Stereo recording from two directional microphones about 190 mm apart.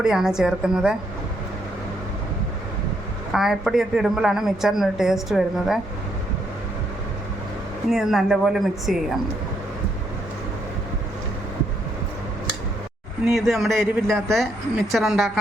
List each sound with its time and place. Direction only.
0.0 s a woman's voice: 5° right (ahead or behind)
3.3 s a woman's voice: centre (ahead or behind)
7.9 s a woman's voice: centre (ahead or behind)
13.2 s a woman's voice: centre (ahead or behind)